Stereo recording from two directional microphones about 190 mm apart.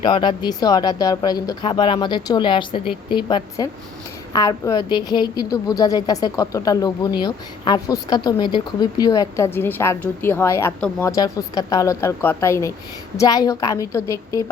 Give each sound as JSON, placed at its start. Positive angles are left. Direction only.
{"t": 0.0, "sound": "a woman's voice", "side_deg": 25}
{"t": 11.1, "sound": "speech", "side_deg": 20}